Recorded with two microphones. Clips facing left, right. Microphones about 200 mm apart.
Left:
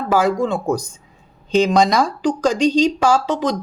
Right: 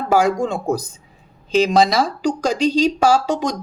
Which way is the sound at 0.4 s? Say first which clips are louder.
Left 1 dB; 45° right (ahead or behind).